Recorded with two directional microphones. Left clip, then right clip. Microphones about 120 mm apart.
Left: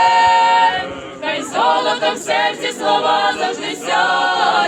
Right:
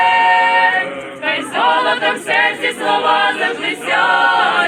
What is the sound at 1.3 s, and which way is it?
Choir, 5° right (ahead or behind).